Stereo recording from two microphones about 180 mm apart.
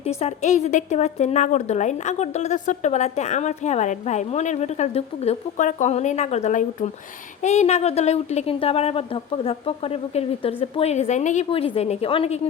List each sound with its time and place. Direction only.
0.0 s a woman's voice: 35° left (ahead or behind)